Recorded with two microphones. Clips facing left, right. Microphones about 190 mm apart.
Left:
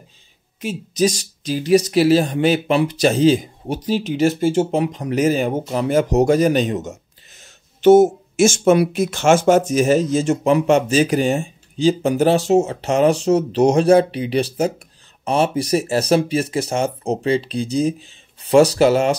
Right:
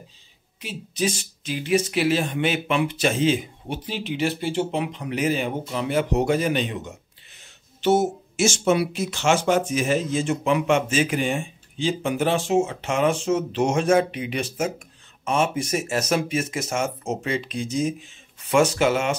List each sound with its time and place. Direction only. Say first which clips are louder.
0.6 s speech: left 8 dB; 45° left (ahead or behind)